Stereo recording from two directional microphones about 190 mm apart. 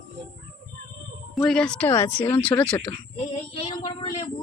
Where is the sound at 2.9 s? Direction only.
30° left (ahead or behind).